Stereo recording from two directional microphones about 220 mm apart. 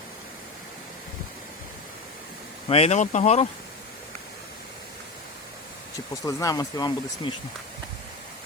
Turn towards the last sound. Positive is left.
turn(degrees=15)  # may be behind; listen again after turning